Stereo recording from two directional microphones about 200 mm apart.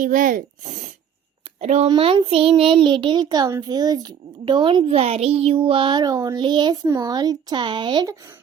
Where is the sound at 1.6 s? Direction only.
30° right (ahead or behind).